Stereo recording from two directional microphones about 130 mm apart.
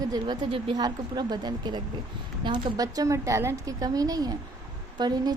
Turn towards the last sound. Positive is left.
turn(degrees=-35)  # may be behind; listen again after turning